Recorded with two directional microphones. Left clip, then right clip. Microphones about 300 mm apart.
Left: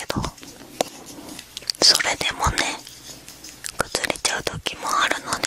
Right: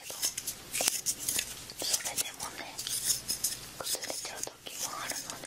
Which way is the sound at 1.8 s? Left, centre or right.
Left.